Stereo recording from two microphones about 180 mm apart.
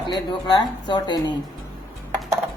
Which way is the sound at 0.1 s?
25° left (ahead or behind).